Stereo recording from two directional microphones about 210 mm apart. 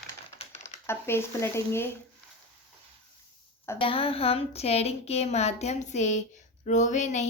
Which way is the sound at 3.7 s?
25° left (ahead or behind).